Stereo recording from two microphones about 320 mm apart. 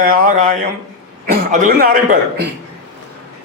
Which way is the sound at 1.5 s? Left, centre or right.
Right.